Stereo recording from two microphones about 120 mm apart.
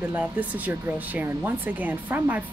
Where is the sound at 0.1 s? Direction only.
15° right (ahead or behind).